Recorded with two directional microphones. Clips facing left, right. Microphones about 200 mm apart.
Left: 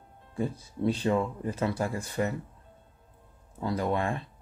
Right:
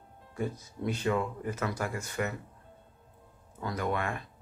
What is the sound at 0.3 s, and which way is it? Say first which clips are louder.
Speech: left 3 dB; 30° left (ahead or behind).